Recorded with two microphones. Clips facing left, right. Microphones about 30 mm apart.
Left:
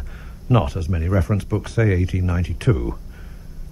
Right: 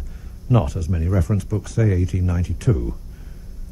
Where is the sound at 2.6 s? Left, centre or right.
Left.